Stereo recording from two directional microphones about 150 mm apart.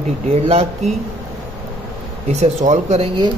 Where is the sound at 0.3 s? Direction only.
45° right (ahead or behind).